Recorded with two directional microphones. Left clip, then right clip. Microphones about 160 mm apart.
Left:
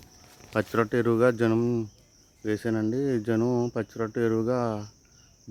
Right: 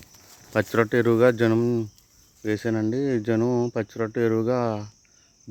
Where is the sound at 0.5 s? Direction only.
20° right (ahead or behind).